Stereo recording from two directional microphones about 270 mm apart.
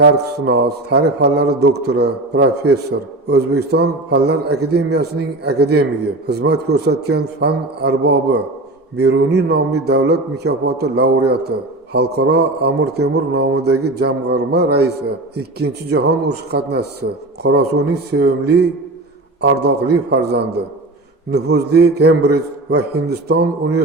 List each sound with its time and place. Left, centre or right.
0.0 s a man's voice: right